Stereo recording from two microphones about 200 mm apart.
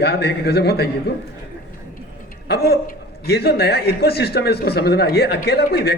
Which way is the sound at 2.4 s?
50° left (ahead or behind).